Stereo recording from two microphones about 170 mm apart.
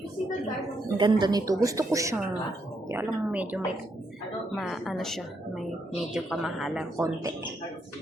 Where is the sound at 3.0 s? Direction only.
10° right (ahead or behind).